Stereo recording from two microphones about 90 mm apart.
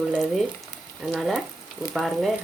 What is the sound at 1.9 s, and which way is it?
Speech, centre (ahead or behind).